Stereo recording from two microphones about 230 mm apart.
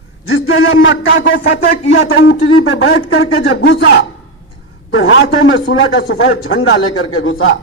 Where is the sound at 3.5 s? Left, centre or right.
Left.